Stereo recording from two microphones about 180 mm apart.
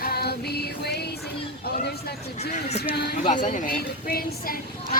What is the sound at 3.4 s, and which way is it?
A woman's voice, 50° left (ahead or behind).